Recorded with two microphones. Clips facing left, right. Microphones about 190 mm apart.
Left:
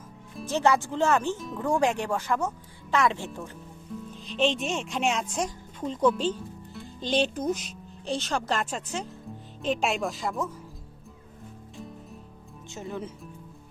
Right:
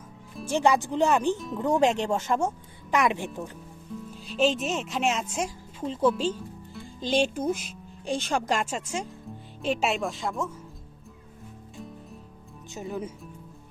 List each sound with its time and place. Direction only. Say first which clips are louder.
0.4 s speech: right 1 dB; 15° right (ahead or behind)
12.7 s speech: right 2 dB; 15° right (ahead or behind)